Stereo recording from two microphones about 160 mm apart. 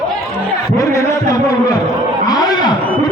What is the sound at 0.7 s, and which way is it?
Speech, 20° left (ahead or behind).